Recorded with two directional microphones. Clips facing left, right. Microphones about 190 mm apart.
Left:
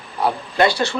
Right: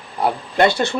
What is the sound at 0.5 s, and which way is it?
Speech, 20° right (ahead or behind).